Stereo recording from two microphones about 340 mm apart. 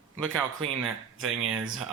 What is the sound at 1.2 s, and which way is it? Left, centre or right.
Speech, right.